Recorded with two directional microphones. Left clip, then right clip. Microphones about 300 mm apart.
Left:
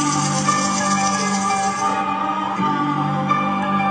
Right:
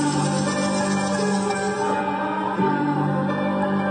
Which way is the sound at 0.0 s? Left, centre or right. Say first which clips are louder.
Left 4 dB; left.